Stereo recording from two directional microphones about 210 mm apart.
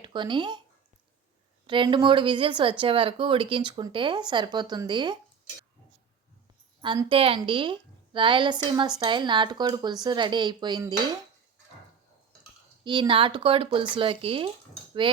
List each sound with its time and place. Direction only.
0.0 s speech: 20° right (ahead or behind)
1.6 s a woman's voice: 25° right (ahead or behind)
6.8 s a woman's voice: 20° right (ahead or behind)
12.8 s a woman's voice: 20° right (ahead or behind)
15.0 s hammer: 25° right (ahead or behind)